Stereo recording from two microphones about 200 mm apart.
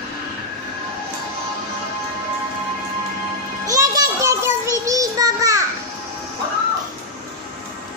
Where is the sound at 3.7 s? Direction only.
15° right (ahead or behind).